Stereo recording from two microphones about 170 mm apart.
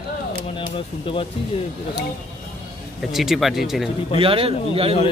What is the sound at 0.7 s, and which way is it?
Speech, 30° left (ahead or behind).